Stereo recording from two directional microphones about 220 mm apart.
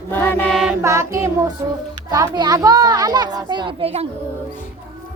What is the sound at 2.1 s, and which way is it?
A child's voice, 20° right (ahead or behind).